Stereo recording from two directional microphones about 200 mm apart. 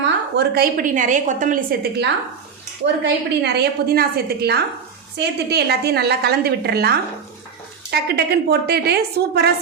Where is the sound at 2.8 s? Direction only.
60° right (ahead or behind).